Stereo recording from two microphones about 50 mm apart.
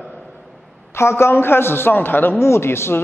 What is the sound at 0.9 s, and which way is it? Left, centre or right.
Speech, left.